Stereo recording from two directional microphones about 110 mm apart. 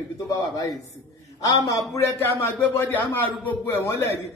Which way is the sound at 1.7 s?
30° left (ahead or behind).